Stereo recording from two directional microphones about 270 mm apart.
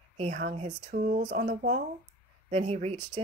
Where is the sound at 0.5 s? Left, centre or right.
Right.